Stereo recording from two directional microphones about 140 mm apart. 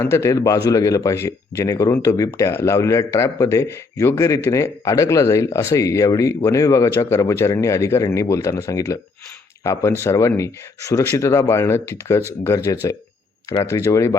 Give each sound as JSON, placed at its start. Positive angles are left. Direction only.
{"t": 0.0, "sound": "speech", "side_deg": 20}
{"t": 10.0, "sound": "speech", "side_deg": 20}